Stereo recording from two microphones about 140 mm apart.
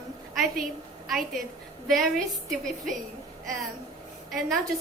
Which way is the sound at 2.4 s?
Centre (ahead or behind).